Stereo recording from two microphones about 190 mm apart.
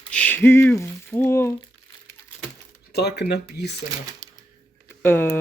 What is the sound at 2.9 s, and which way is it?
Speech, 60° left (ahead or behind).